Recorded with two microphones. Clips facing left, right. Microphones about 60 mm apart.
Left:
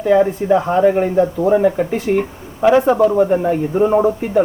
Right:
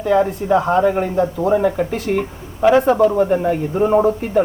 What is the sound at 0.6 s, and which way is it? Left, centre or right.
Speech, left.